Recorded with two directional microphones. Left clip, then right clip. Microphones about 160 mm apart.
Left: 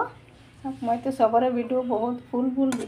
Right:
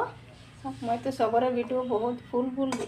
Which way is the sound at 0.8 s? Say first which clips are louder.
Left 5 dB; 10° left (ahead or behind).